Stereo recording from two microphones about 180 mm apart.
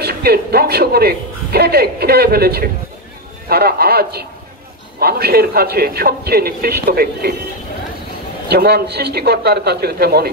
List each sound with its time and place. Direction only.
0.0 s a man's voice: 60° right (ahead or behind)
8.5 s a man's voice: 60° right (ahead or behind)